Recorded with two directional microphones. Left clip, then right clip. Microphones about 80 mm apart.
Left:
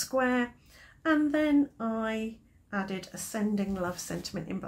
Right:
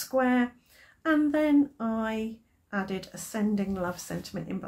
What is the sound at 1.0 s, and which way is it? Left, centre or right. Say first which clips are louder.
Speech: right 2 dB; left.